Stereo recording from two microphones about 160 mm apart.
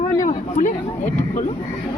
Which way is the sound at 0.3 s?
50° left (ahead or behind).